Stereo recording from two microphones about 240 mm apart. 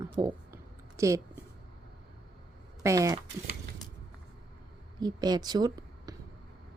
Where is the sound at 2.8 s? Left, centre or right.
Centre.